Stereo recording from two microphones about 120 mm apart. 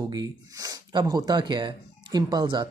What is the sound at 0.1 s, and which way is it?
Speech, 30° right (ahead or behind).